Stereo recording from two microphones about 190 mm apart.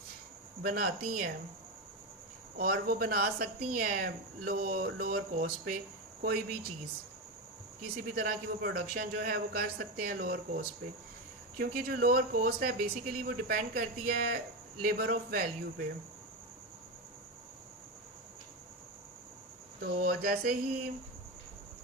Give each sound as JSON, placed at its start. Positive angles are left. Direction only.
{"t": 0.6, "sound": "speech", "side_deg": -50}
{"t": 2.6, "sound": "speech", "side_deg": -50}
{"t": 8.1, "sound": "speech", "side_deg": -50}
{"t": 19.8, "sound": "speech", "side_deg": -50}